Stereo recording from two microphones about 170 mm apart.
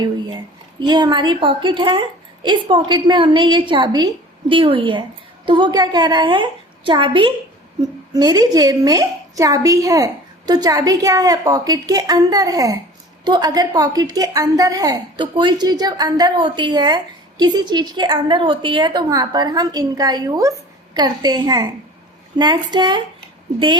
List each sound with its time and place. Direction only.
0.8 s a woman's voice: 25° right (ahead or behind)